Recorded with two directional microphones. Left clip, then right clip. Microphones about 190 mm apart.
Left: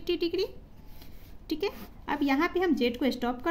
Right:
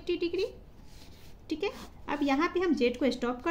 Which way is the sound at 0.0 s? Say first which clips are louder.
Left 2 dB; 35° left (ahead or behind).